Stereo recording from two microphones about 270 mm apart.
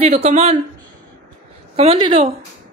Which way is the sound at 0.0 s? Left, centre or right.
Right.